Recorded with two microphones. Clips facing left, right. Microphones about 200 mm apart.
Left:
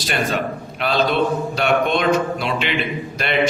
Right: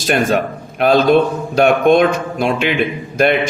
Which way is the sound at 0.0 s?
45° right (ahead or behind).